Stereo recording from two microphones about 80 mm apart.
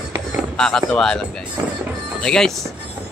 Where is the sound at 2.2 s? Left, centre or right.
Centre.